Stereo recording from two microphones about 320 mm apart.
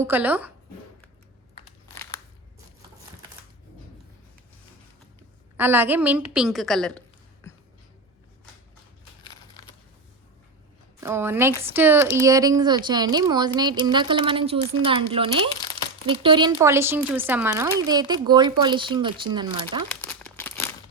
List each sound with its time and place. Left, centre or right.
0.0 s a woman's voice: centre
2.0 s scissors: centre
5.5 s a woman's voice: centre
9.6 s a sound: centre
11.0 s speech: centre
20.0 s crumpling: centre